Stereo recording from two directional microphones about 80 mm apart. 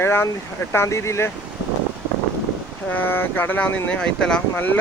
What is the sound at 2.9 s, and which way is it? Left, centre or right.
Speech, left.